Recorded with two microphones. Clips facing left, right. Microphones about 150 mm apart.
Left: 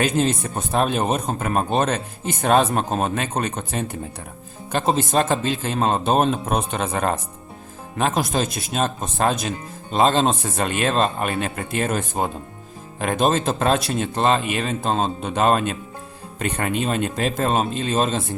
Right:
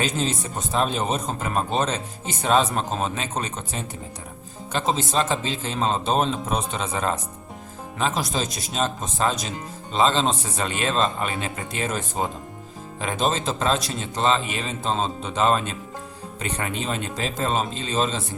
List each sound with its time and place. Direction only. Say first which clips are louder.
0.0 s a man's voice: left 5 dB; 55° left (ahead or behind)